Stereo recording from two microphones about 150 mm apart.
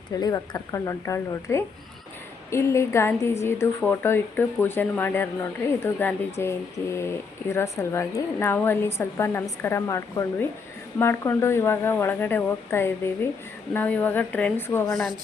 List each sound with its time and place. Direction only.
0.1 s a woman's voice: 25° left (ahead or behind)
14.8 s speech: centre (ahead or behind)